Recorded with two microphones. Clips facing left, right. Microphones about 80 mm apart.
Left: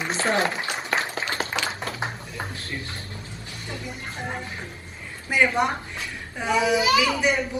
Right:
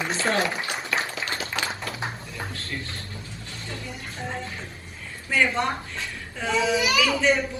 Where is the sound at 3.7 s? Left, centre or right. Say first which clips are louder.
Left 2 dB; centre.